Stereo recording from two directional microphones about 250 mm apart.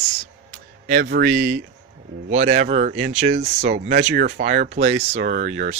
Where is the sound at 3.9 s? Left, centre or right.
Right.